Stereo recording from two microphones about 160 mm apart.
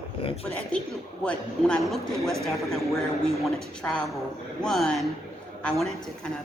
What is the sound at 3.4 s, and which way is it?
A man's voice, 5° left (ahead or behind).